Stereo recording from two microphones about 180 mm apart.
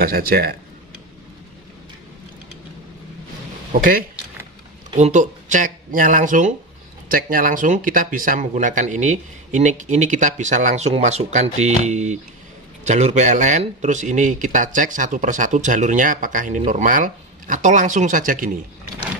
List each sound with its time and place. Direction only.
0.0 s speech: 55° right (ahead or behind)
3.7 s speech: 50° right (ahead or behind)